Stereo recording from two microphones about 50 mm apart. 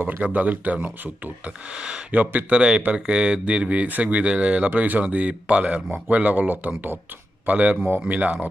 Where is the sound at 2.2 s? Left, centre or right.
Right.